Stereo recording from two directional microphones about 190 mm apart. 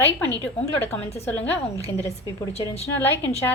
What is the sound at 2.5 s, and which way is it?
Speech, 30° left (ahead or behind).